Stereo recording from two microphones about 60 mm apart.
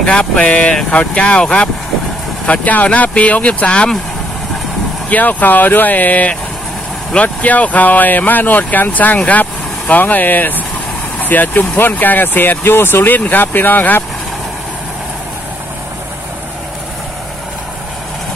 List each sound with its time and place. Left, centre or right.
0.0 s speech: centre
5.1 s speech: left